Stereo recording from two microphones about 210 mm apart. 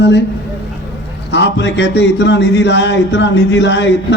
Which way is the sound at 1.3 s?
55° left (ahead or behind).